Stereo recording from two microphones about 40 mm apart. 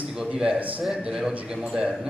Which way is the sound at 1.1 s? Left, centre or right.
Centre.